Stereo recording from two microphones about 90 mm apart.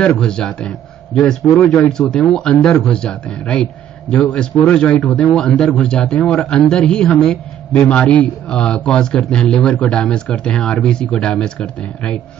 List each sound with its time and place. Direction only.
0.2 s a man's voice: 10° left (ahead or behind)